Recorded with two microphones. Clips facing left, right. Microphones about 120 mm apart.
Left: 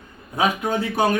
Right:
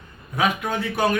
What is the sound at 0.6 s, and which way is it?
Speech, 15° left (ahead or behind).